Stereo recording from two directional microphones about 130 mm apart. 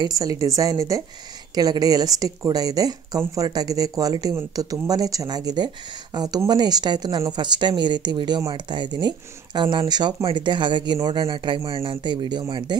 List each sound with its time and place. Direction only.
0.0 s a woman's voice: 25° right (ahead or behind)